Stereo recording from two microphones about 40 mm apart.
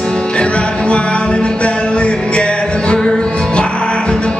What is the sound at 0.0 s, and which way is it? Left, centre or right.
Music, centre.